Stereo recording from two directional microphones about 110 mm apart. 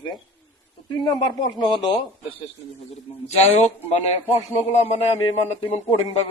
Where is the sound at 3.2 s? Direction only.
85° left.